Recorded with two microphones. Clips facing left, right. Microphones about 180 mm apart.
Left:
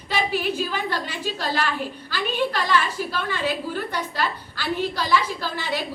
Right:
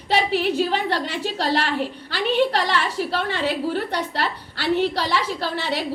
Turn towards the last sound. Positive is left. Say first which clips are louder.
# right 3 dB
turn(degrees=-70)  # may be behind; listen again after turning